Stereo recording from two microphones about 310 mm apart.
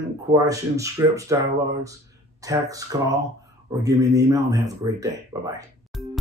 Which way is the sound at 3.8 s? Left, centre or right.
Centre.